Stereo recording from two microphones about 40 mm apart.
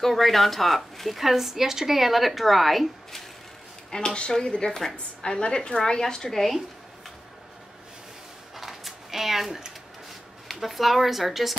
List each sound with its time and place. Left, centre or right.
0.0 s speech: centre
3.9 s a woman's voice: left
8.5 s a sound: centre
10.5 s speech: centre